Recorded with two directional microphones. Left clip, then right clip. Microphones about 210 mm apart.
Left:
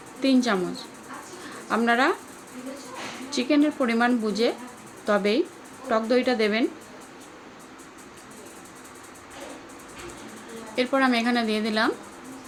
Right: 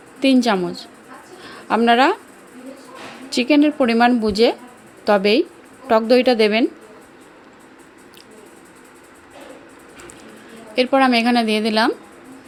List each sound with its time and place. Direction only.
0.2 s speech: 35° right (ahead or behind)
3.2 s speech: 35° right (ahead or behind)
10.8 s speech: 35° right (ahead or behind)